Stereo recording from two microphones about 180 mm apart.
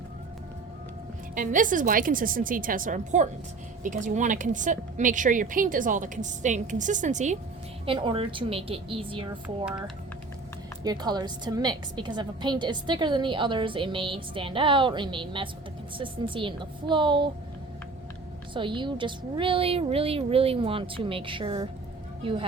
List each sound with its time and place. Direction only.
1.4 s a woman's voice: 45° right (ahead or behind)
7.9 s a woman's voice: 30° right (ahead or behind)
9.6 s speech: 5° right (ahead or behind)
10.8 s a woman's voice: 20° right (ahead or behind)
18.5 s a woman's voice: 25° right (ahead or behind)